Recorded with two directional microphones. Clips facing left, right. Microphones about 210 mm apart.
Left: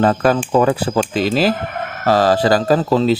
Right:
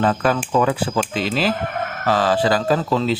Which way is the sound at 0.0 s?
40° left (ahead or behind).